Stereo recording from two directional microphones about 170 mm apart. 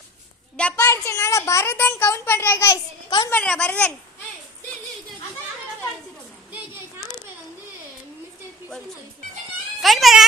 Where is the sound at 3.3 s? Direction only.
5° left (ahead or behind).